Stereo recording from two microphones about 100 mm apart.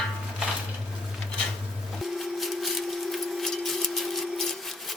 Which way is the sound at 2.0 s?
Centre (ahead or behind).